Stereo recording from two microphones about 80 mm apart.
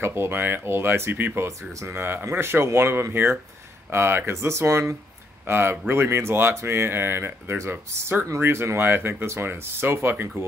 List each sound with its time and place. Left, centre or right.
0.0 s speech: right